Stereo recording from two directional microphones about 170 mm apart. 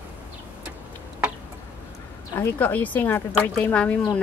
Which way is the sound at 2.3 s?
10° left (ahead or behind).